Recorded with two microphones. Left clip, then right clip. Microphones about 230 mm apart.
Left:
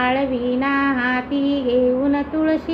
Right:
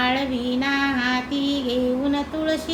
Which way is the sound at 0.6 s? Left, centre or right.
Centre.